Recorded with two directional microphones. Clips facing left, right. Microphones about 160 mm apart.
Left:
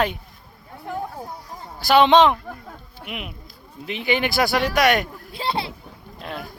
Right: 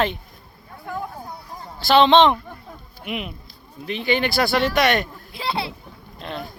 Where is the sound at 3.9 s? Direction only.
15° left (ahead or behind).